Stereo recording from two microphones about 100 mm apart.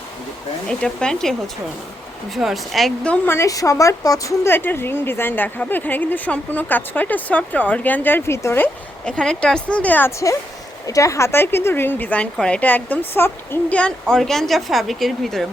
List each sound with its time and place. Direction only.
0.7 s a woman's voice: 10° left (ahead or behind)
3.2 s speech: 30° left (ahead or behind)
4.4 s speech: 20° left (ahead or behind)
9.0 s a woman's voice: 10° left (ahead or behind)
10.8 s a woman's voice: 35° left (ahead or behind); by 15.4 s centre (ahead or behind)